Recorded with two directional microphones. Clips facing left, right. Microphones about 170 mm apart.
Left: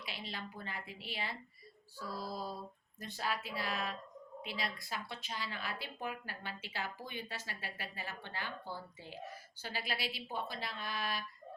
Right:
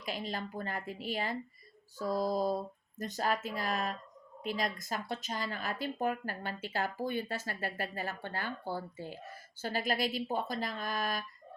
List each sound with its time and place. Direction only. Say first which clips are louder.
0.0 s speech: right 8 dB; 45° right (ahead or behind)